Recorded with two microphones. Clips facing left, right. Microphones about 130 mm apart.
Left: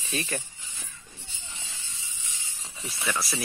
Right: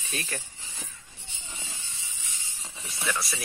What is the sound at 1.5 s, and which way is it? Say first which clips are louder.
Hiss: right 3 dB; 50° right (ahead or behind).